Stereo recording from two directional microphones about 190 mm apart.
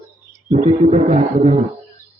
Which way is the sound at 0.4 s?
35° right (ahead or behind).